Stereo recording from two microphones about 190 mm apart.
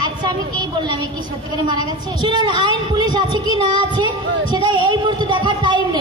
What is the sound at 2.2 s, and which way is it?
Speech, 25° right (ahead or behind).